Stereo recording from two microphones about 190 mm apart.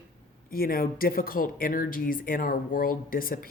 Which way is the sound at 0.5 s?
50° left (ahead or behind).